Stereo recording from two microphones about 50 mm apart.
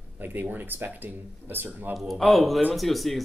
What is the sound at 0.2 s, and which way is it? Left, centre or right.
Speech, right.